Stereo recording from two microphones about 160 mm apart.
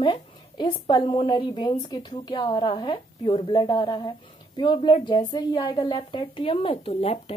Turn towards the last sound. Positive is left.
turn(degrees=40)  # may be behind; listen again after turning